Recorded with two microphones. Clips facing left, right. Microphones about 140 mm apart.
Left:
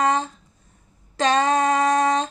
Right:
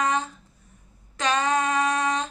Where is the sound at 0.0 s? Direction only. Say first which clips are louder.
Left 4 dB; 35° left (ahead or behind).